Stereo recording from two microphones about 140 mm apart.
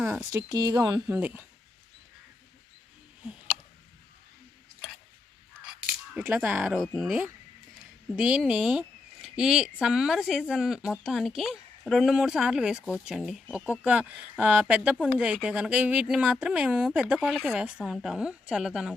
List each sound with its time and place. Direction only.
0.3 s speech: 25° right (ahead or behind)
1.1 s speech: 15° right (ahead or behind)
6.1 s speech: 10° right (ahead or behind)